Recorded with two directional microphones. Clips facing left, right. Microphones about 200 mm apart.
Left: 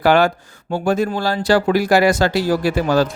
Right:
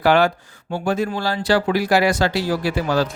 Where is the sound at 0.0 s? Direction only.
45° left (ahead or behind).